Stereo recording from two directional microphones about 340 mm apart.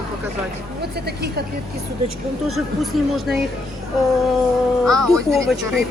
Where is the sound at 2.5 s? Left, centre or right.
Centre.